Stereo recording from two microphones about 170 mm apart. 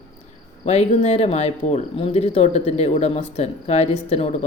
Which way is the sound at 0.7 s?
40° left (ahead or behind).